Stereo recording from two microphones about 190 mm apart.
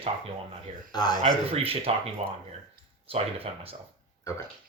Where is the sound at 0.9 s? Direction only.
20° left (ahead or behind).